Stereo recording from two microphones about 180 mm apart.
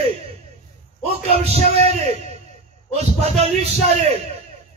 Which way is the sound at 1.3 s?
35° right (ahead or behind).